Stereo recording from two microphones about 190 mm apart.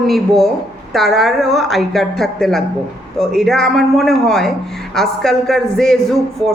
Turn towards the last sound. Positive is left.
turn(degrees=0)  # may be behind; listen again after turning